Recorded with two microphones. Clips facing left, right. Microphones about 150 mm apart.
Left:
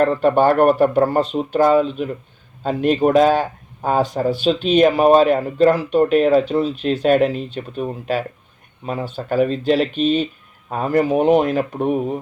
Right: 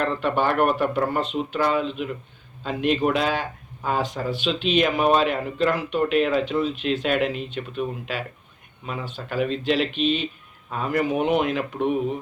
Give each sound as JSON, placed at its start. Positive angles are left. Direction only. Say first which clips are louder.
{"t": 0.0, "sound": "speech", "louder": "left 8 dB", "side_deg": 40}